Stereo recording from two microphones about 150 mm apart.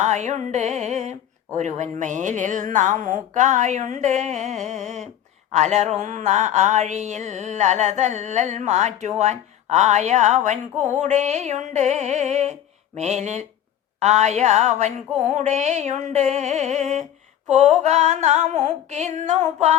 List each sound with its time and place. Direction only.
0.0 s mantra: 50° right (ahead or behind)
1.5 s speech: 50° right (ahead or behind)
5.5 s mantra: 50° right (ahead or behind)